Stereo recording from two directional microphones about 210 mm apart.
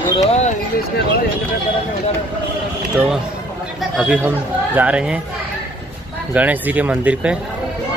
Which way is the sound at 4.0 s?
5° right (ahead or behind).